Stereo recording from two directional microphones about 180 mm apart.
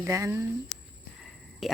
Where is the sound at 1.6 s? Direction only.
Centre (ahead or behind).